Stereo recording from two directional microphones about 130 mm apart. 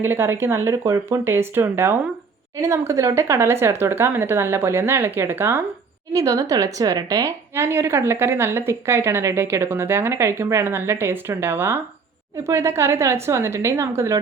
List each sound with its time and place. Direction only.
0.0 s a woman's voice: 20° right (ahead or behind)